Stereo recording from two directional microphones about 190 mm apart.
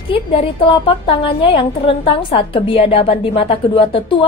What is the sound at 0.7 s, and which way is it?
A woman's voice, 30° left (ahead or behind).